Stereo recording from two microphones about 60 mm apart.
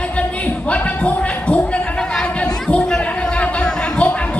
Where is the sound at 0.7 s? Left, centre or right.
Left.